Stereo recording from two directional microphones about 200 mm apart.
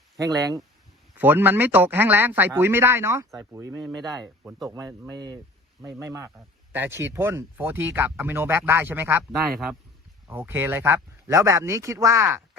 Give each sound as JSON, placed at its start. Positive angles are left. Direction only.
{"t": 0.2, "sound": "speech", "side_deg": -15}
{"t": 9.3, "sound": "a man's voice", "side_deg": 0}
{"t": 10.2, "sound": "speech", "side_deg": -10}